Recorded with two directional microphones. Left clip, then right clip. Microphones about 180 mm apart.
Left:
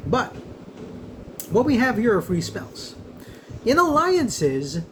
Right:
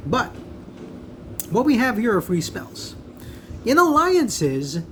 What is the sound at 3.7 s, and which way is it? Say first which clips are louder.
Speech: right 2 dB; 55° right (ahead or behind).